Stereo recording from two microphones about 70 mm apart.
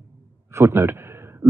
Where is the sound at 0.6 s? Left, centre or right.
Right.